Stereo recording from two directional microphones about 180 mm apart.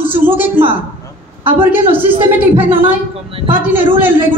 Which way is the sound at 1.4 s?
10° right (ahead or behind).